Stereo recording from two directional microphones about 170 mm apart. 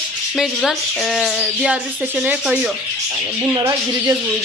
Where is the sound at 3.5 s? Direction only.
20° right (ahead or behind).